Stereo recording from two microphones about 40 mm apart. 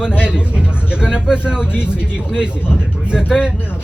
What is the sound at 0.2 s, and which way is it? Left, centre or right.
Speech, right.